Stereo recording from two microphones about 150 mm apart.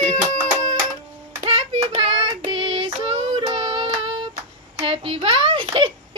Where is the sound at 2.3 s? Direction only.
30° right (ahead or behind).